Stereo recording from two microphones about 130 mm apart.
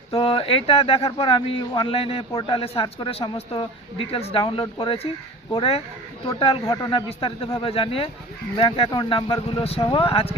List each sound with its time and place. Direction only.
0.1 s speech: 45° left (ahead or behind)